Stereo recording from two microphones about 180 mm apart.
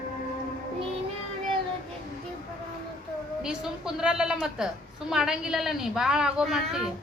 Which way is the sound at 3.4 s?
5° right (ahead or behind).